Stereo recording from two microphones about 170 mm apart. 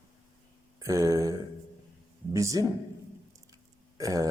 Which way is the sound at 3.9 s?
20° right (ahead or behind).